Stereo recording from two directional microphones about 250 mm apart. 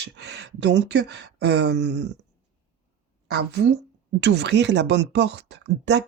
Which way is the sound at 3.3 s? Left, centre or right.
Right.